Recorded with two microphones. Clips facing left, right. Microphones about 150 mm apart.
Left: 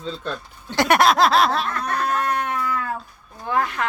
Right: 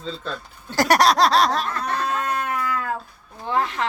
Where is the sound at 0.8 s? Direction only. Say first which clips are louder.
Even; 35° right (ahead or behind).